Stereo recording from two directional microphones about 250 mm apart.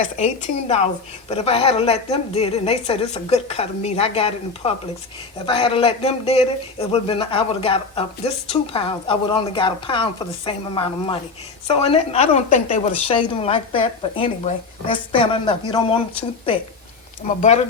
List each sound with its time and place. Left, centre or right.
0.0 s a man's voice: left